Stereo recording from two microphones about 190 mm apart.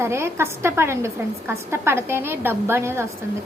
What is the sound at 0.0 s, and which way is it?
Speech, 15° right (ahead or behind).